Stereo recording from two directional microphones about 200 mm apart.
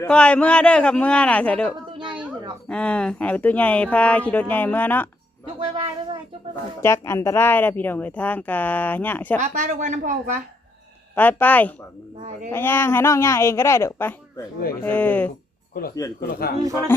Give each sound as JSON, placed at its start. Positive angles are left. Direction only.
{"t": 0.0, "sound": "a man's voice", "side_deg": 5}
{"t": 5.5, "sound": "a sound", "side_deg": -25}
{"t": 6.8, "sound": "speech", "side_deg": 15}
{"t": 9.4, "sound": "speech", "side_deg": -40}
{"t": 11.1, "sound": "speech", "side_deg": 10}
{"t": 16.3, "sound": "a man's voice", "side_deg": 50}